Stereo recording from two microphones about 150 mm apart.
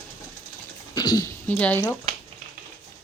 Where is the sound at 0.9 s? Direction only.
25° left (ahead or behind).